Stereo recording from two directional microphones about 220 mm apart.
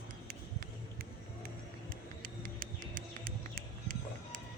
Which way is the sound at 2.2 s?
40° right (ahead or behind).